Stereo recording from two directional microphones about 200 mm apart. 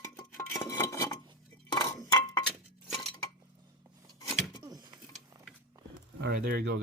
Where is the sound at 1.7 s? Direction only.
15° left (ahead or behind).